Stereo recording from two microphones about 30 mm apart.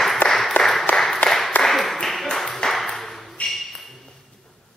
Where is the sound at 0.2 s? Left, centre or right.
Left.